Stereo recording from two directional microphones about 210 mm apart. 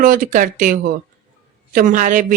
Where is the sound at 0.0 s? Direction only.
40° right (ahead or behind).